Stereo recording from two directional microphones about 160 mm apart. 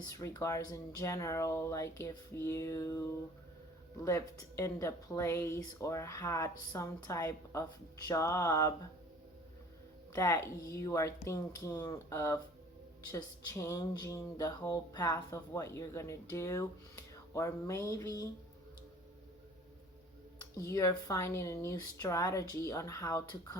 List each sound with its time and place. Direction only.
0.0 s speech: 20° left (ahead or behind)
10.1 s speech: 20° left (ahead or behind)
20.4 s speech: 20° left (ahead or behind)